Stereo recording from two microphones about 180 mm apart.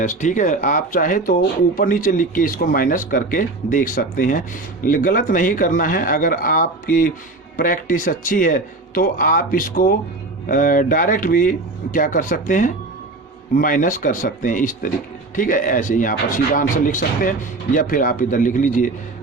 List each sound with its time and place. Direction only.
0.0 s speech: 45° left (ahead or behind)